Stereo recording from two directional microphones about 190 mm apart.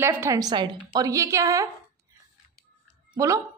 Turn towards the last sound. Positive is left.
turn(degrees=-15)  # may be behind; listen again after turning